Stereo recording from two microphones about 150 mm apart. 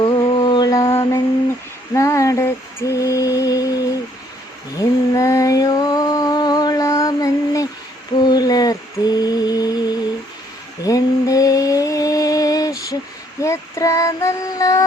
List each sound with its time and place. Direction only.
0.0 s mantra: 30° left (ahead or behind)
4.8 s music: 20° left (ahead or behind)
8.3 s mantra: 25° left (ahead or behind)
10.8 s mantra: 25° left (ahead or behind)
13.4 s child singing: 20° left (ahead or behind)